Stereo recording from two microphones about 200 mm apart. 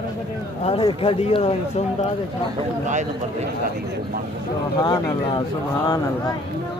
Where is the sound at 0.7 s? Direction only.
25° left (ahead or behind).